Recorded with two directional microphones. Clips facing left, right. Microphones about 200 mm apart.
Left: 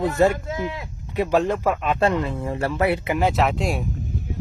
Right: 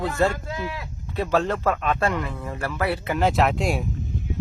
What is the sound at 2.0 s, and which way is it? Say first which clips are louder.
Speech: left 4 dB; 25° left (ahead or behind).